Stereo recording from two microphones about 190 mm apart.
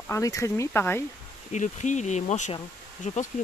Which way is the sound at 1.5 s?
40° left (ahead or behind).